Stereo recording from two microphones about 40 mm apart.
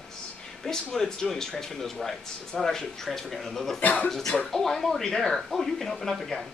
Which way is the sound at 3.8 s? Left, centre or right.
Left.